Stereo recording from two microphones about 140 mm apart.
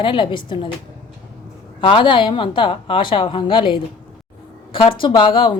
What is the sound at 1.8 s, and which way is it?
A woman's voice, 35° left (ahead or behind).